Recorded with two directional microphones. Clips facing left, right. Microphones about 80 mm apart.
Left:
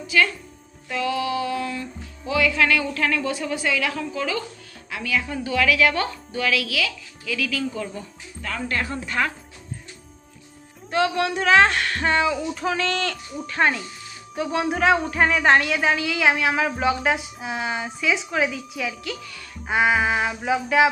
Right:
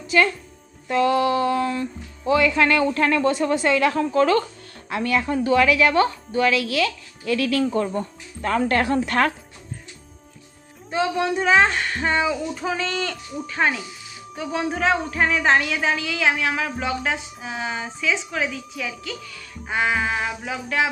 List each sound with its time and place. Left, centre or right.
1.0 s music: right
5.6 s a woman's voice: right
7.9 s speech: right
8.8 s speech: right
10.9 s a woman's voice: centre